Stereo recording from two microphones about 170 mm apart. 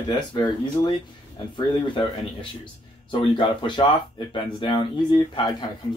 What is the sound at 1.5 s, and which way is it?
Speech, 30° left (ahead or behind).